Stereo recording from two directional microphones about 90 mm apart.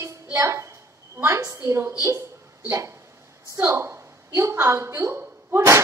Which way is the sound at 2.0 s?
30° right (ahead or behind).